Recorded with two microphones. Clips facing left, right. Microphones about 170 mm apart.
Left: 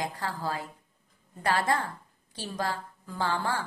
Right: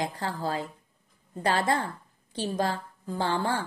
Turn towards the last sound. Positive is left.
turn(degrees=-25)  # may be behind; listen again after turning